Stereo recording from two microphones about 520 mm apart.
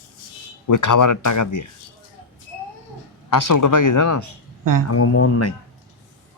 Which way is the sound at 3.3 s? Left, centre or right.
Left.